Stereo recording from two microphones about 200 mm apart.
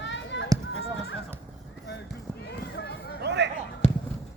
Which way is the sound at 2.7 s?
50° left (ahead or behind).